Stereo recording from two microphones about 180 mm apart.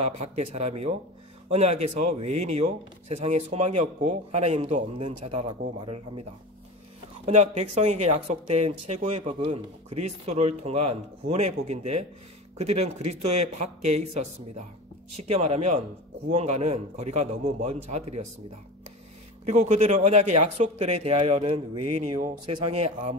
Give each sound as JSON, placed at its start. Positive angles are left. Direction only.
{"t": 0.0, "sound": "speech", "side_deg": -35}
{"t": 7.2, "sound": "speech", "side_deg": -35}
{"t": 19.4, "sound": "speech", "side_deg": -40}